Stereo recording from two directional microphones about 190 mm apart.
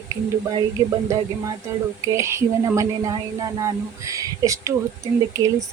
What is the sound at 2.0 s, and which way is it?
Speech, 15° right (ahead or behind).